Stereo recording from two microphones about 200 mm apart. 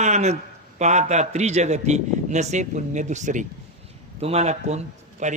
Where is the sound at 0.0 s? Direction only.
35° right (ahead or behind).